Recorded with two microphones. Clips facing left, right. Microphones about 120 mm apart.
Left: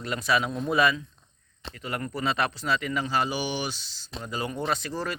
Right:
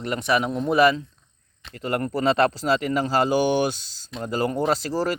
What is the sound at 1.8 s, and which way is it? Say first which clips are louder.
Speech: right 7 dB; 40° right (ahead or behind).